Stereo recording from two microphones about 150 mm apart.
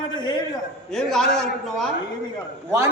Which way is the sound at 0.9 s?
5° left (ahead or behind).